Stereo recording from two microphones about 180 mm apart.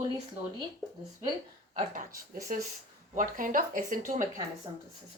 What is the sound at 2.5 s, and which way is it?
Speech, 45° right (ahead or behind).